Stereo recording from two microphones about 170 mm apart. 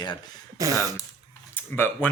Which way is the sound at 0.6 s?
20° right (ahead or behind).